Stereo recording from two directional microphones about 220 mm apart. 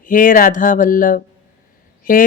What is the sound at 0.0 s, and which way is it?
A woman's voice, 40° left (ahead or behind).